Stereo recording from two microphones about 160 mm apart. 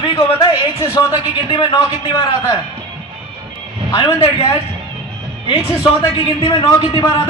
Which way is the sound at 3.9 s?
30° left (ahead or behind).